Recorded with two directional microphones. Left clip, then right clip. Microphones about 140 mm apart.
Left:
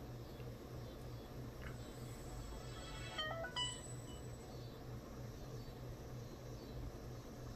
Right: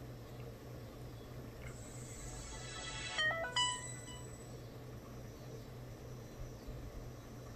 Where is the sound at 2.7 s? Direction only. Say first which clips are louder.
Right 7 dB; 30° right (ahead or behind).